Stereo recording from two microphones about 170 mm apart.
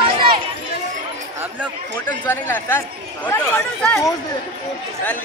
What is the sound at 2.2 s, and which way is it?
Speech, 10° left (ahead or behind).